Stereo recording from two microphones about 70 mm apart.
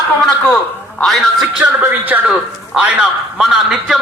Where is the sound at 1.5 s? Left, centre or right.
Centre.